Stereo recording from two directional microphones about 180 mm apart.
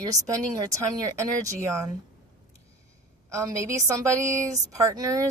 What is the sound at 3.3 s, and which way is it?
A woman's voice, 15° right (ahead or behind).